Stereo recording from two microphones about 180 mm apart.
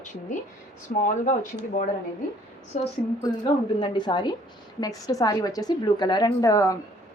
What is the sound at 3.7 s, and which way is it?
A woman's voice, 25° left (ahead or behind).